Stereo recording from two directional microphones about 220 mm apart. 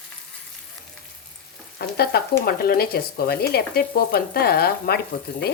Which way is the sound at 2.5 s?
45° left (ahead or behind).